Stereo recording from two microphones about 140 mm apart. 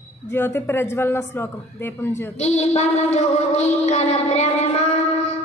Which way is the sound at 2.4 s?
50° left (ahead or behind).